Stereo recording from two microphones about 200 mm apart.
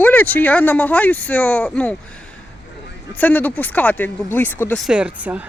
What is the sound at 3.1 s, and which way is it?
Speech, 10° left (ahead or behind).